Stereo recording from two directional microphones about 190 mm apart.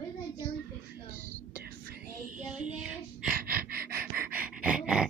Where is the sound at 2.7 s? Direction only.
5° right (ahead or behind).